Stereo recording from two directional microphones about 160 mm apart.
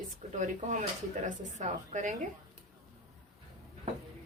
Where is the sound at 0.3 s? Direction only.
50° right (ahead or behind).